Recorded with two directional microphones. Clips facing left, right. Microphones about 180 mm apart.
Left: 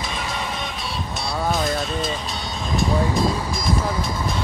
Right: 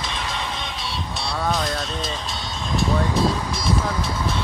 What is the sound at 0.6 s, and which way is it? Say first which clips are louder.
Music: left 1 dB; 50° left (ahead or behind).